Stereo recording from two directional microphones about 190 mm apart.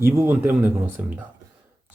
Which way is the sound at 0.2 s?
10° right (ahead or behind).